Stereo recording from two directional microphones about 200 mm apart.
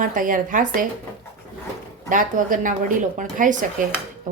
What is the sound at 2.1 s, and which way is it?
Speech, 40° right (ahead or behind).